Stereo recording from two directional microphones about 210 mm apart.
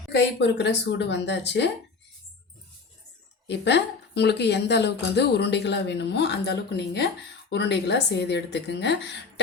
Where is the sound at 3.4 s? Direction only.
55° left (ahead or behind).